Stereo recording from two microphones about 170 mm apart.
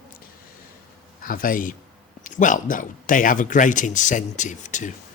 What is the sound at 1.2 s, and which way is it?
Speech, 55° left (ahead or behind).